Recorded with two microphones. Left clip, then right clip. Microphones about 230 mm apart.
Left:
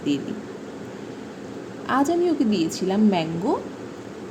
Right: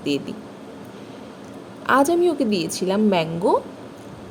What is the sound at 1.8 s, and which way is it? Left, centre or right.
A woman's voice, right.